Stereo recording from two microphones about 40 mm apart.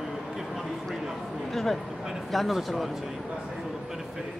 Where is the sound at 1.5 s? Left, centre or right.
Centre.